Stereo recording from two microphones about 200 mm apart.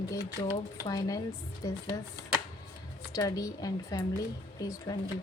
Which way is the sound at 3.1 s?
15° left (ahead or behind).